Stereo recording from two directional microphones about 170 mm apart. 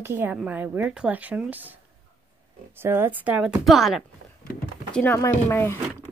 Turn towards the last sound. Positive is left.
turn(degrees=15)  # may be behind; listen again after turning